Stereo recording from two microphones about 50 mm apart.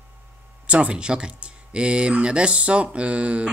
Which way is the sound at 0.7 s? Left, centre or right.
Right.